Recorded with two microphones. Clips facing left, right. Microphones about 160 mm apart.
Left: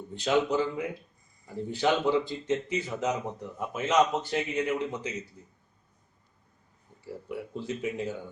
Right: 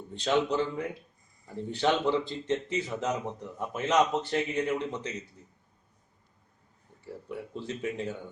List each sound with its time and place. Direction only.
0.1 s a man's voice: 5° left (ahead or behind)
7.0 s speech: 10° left (ahead or behind)